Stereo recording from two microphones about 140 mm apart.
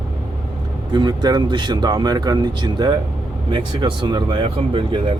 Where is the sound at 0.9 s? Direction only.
30° right (ahead or behind).